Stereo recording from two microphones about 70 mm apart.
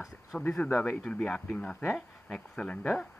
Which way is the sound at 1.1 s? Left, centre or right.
Centre.